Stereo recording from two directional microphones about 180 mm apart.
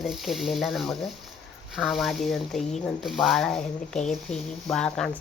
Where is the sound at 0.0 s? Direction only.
Centre (ahead or behind).